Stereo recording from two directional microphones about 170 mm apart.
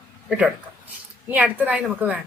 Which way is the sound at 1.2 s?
10° right (ahead or behind).